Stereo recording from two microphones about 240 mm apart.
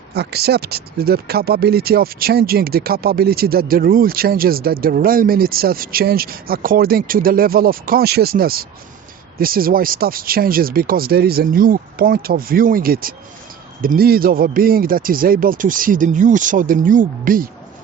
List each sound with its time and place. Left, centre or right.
0.1 s speech: right